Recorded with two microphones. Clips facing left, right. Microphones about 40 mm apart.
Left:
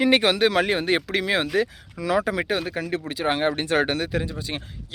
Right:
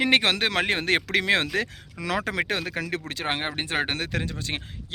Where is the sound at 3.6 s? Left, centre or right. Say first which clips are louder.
Left 5 dB; right.